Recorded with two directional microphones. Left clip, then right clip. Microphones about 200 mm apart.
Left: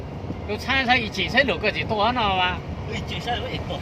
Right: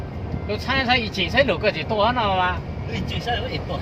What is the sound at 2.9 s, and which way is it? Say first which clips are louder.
Speech: right 2 dB; 50° right (ahead or behind).